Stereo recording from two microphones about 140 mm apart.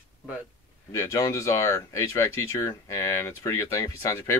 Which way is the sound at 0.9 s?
20° left (ahead or behind).